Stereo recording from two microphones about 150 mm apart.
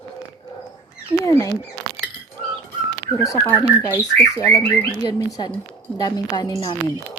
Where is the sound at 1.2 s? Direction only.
20° left (ahead or behind).